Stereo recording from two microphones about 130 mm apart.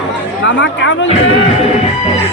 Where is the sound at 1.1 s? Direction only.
50° left (ahead or behind).